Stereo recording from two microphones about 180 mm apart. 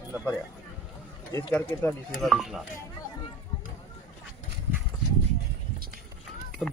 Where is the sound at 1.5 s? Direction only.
5° left (ahead or behind).